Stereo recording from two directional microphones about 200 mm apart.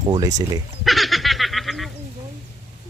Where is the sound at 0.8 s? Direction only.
Centre (ahead or behind).